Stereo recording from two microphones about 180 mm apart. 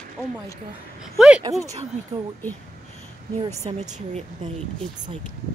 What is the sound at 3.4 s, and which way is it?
Speech, 20° right (ahead or behind).